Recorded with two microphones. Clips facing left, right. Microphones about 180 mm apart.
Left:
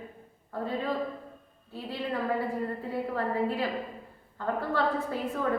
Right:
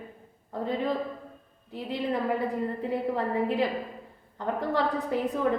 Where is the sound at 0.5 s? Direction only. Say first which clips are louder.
Right 2 dB; 20° right (ahead or behind).